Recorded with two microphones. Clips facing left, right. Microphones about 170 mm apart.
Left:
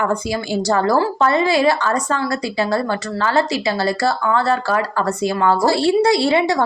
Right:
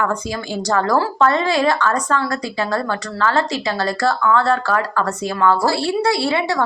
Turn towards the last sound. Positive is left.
turn(degrees=20)  # may be behind; listen again after turning